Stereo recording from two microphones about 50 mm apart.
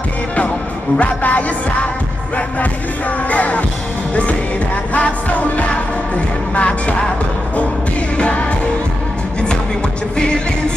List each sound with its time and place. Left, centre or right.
0.9 s music: left
3.3 s music: left
8.2 s music: left
10.1 s music: centre